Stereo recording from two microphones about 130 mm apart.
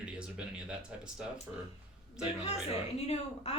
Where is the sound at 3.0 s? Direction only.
55° left (ahead or behind).